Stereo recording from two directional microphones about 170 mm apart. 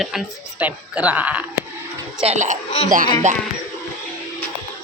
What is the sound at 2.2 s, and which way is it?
Speech, 45° right (ahead or behind).